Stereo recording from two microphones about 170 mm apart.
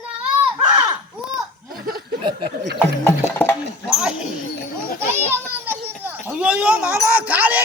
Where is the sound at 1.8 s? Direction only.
60° right (ahead or behind).